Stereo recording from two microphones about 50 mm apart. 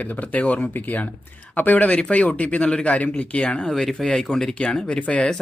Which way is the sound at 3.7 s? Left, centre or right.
Centre.